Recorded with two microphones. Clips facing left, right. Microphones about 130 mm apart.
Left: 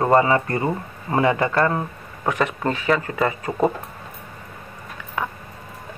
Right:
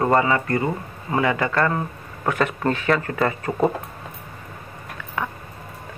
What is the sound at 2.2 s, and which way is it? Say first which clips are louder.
Speech: even; 10° left (ahead or behind).